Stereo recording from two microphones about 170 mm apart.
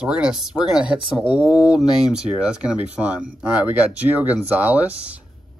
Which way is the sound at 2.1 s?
5° right (ahead or behind).